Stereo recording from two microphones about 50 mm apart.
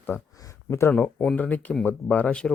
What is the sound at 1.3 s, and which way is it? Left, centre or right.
Speech, left.